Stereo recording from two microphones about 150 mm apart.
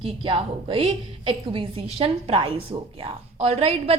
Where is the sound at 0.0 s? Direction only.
35° right (ahead or behind).